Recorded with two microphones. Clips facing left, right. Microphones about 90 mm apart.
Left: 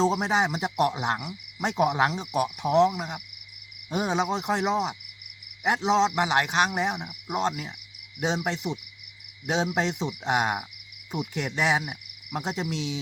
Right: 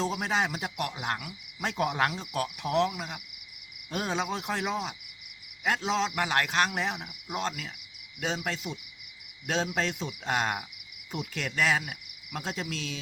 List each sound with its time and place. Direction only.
0.0 s speech: 20° left (ahead or behind)